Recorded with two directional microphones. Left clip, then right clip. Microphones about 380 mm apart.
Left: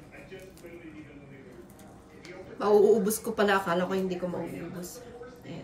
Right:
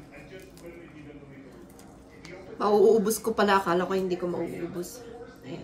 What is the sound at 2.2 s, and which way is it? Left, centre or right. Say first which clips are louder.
A woman's voice: right 2 dB; centre.